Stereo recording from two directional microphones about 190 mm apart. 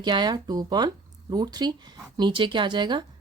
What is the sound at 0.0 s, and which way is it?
Speech, 25° right (ahead or behind).